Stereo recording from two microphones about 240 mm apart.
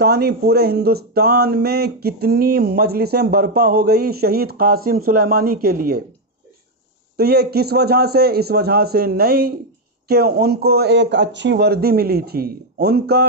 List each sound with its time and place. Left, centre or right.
0.0 s speech: right
7.2 s speech: right